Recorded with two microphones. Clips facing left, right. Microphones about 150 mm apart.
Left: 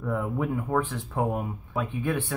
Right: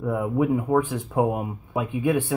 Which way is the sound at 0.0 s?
10° right (ahead or behind).